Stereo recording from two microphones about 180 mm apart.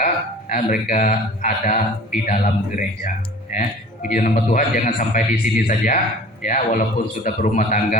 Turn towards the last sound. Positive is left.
turn(degrees=45)  # may be behind; listen again after turning